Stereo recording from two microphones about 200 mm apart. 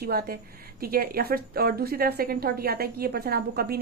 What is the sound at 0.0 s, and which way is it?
A woman's voice, 50° right (ahead or behind).